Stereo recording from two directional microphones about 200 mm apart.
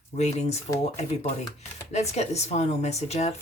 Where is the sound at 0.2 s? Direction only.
35° left (ahead or behind).